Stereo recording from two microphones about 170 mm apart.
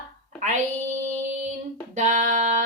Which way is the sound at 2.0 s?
45° right (ahead or behind).